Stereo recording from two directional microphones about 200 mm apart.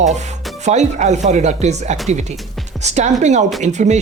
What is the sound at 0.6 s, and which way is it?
Speech, 35° right (ahead or behind).